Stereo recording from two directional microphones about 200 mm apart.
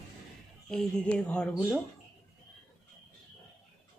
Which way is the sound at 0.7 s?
5° left (ahead or behind).